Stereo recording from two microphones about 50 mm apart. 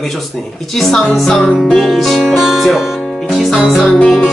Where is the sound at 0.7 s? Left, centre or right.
Centre.